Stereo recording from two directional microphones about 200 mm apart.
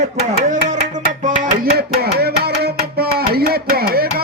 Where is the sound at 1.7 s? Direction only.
50° right (ahead or behind).